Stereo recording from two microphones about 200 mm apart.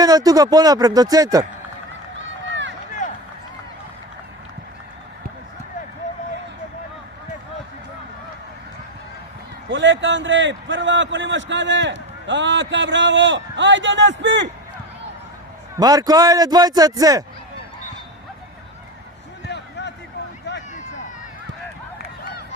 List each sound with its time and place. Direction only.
0.0 s speech: 20° right (ahead or behind)
2.5 s run: 65° right (ahead or behind)
9.6 s a man's voice: 70° right (ahead or behind)
15.7 s a man's voice: 20° right (ahead or behind)